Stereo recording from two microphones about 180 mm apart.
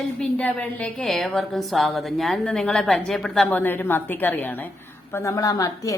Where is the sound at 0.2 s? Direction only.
10° left (ahead or behind).